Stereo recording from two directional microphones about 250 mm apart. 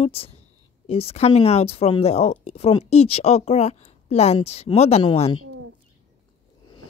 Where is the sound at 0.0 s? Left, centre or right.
Left.